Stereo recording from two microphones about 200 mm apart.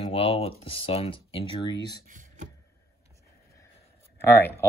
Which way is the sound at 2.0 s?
40° right (ahead or behind).